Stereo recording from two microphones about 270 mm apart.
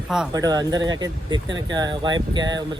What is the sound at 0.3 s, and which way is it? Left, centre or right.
Speech, centre.